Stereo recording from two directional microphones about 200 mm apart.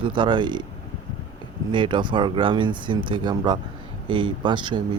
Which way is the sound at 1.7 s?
25° right (ahead or behind).